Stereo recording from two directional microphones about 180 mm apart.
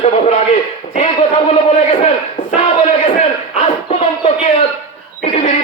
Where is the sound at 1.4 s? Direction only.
35° left (ahead or behind).